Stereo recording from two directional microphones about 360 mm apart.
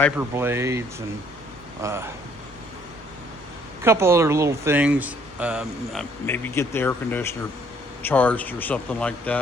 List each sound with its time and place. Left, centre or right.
0.0 s speech: centre
3.8 s speech: centre